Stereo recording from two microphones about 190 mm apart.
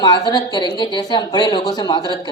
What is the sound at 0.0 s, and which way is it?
Speech, 20° left (ahead or behind).